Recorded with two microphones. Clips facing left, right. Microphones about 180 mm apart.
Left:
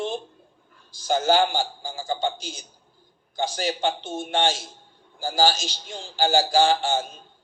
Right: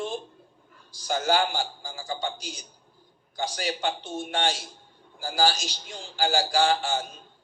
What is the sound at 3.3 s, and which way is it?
A man's voice, 25° left (ahead or behind).